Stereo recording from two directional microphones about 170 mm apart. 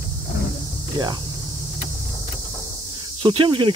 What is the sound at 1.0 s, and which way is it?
Speech, 25° right (ahead or behind).